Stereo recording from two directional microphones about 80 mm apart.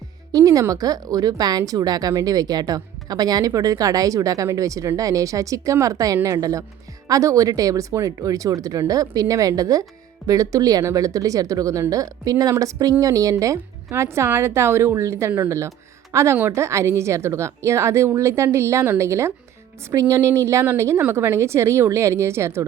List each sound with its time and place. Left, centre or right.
0.3 s a woman's voice: right